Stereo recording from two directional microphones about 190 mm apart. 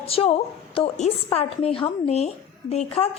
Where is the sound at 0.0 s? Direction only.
30° left (ahead or behind).